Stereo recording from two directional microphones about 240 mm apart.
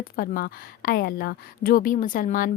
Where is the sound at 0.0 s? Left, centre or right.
Left.